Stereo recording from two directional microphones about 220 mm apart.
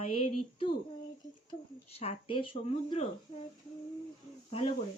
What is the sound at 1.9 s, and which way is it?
Speech, 25° left (ahead or behind).